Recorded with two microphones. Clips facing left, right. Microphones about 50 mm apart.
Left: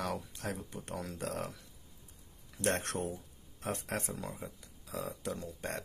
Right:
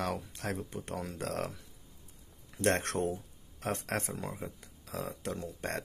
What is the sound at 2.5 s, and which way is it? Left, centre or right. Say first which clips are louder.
Speech: right 4 dB; right.